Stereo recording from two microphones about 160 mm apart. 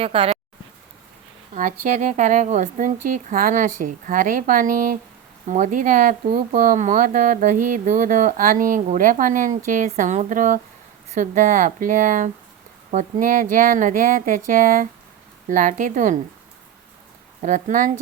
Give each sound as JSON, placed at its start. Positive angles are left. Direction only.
{"t": 0.0, "sound": "speech", "side_deg": -40}
{"t": 1.5, "sound": "speech", "side_deg": -50}
{"t": 17.4, "sound": "speech", "side_deg": -55}